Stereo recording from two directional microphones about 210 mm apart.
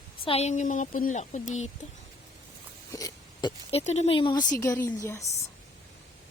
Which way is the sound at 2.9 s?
20° left (ahead or behind).